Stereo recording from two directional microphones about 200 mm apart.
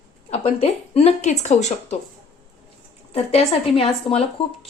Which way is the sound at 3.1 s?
30° left (ahead or behind).